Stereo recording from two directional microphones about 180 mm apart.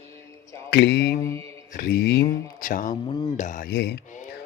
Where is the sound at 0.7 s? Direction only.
65° left (ahead or behind).